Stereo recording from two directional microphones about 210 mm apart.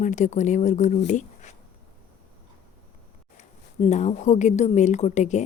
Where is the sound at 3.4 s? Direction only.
35° left (ahead or behind).